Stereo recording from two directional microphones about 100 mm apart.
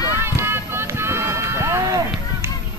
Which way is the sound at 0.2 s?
25° right (ahead or behind).